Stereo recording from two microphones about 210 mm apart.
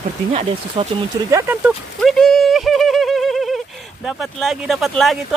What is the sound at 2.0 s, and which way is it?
Horse, centre (ahead or behind).